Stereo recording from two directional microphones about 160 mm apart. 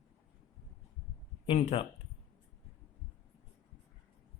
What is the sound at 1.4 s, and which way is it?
Speech, 35° left (ahead or behind).